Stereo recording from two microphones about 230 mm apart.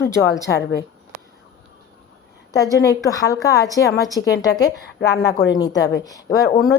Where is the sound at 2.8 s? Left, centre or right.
Centre.